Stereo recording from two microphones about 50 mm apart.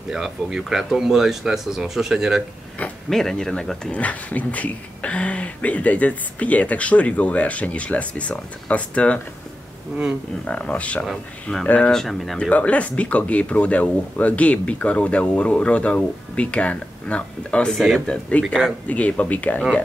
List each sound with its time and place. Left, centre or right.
0.1 s speech: centre
3.1 s speech: centre
3.9 s speech: left
10.4 s speech: left
11.9 s speech: centre
12.4 s speech: left